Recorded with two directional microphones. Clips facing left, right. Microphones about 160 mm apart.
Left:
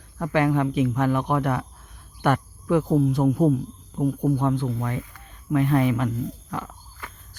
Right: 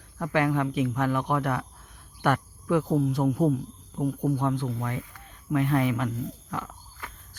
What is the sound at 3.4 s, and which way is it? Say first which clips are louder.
Speech: left 4 dB; 20° left (ahead or behind).